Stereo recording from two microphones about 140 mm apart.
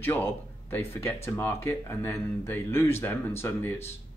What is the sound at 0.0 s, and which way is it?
Speech, 15° left (ahead or behind).